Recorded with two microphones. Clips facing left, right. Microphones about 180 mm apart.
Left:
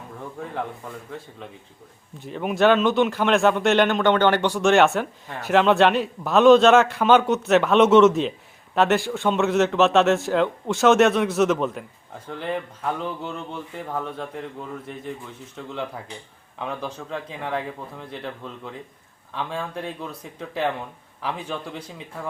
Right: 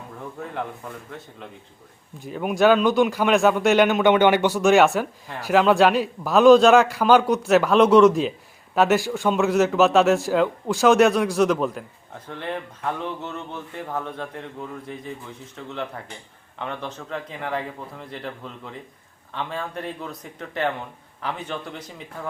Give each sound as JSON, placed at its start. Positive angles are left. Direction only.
{"t": 2.2, "sound": "speech", "side_deg": 0}
{"t": 15.5, "sound": "speech", "side_deg": 5}